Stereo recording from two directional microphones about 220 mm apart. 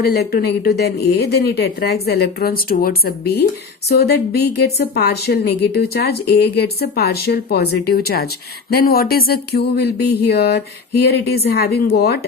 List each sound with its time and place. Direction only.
0.0 s a woman's voice: 45° left (ahead or behind)